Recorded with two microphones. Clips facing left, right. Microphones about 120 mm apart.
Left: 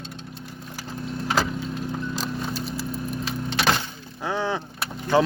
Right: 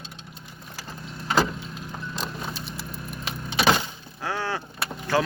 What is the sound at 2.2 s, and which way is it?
Horse, centre (ahead or behind).